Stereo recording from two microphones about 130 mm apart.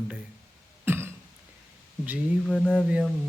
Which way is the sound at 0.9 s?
20° right (ahead or behind).